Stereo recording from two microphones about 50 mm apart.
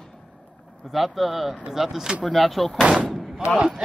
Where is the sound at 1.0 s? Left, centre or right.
Centre.